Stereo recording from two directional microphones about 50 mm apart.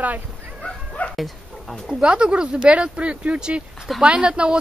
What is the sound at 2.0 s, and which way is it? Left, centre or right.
Speech, right.